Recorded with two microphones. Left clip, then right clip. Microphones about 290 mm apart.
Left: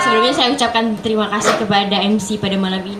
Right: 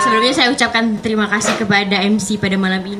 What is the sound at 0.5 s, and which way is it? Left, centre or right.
Speech, right.